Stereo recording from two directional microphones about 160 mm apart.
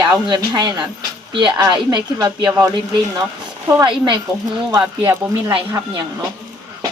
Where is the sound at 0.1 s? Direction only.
25° right (ahead or behind).